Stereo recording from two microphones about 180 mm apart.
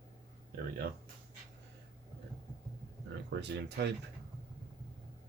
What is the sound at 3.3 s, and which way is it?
Speech, 70° right (ahead or behind).